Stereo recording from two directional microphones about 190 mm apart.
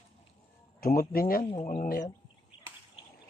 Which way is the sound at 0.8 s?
50° left (ahead or behind).